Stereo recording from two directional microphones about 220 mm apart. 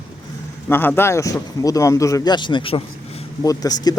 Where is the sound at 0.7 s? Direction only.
10° left (ahead or behind).